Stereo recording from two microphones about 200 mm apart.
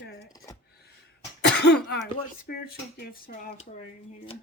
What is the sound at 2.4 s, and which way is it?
Speech, 50° left (ahead or behind).